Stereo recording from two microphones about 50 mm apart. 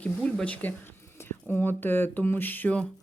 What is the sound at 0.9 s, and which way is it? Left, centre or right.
Speech, left.